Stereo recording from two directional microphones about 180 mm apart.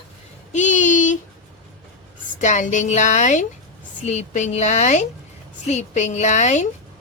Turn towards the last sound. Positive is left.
turn(degrees=40)  # may be behind; listen again after turning